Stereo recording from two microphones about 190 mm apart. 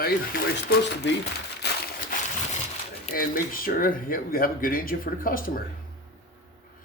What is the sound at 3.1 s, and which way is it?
Speech, 50° left (ahead or behind).